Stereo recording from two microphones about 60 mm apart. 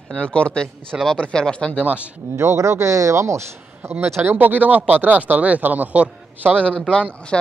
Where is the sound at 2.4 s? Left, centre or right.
Right.